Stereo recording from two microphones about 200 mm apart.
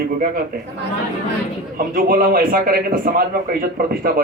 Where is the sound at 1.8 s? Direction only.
45° right (ahead or behind).